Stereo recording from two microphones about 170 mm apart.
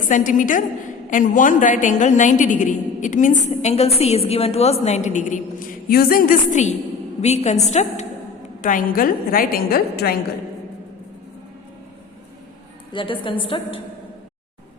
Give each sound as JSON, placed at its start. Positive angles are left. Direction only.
{"t": 0.1, "sound": "a woman's voice", "side_deg": 50}
{"t": 8.6, "sound": "a woman's voice", "side_deg": 55}
{"t": 12.9, "sound": "a woman's voice", "side_deg": 30}